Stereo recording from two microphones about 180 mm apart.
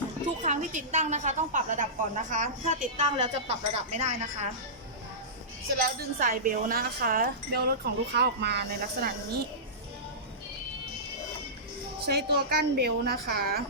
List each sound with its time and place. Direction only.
0.4 s a woman's voice: 40° right (ahead or behind)
5.7 s a woman's voice: 50° right (ahead or behind)
12.0 s a woman's voice: 60° right (ahead or behind)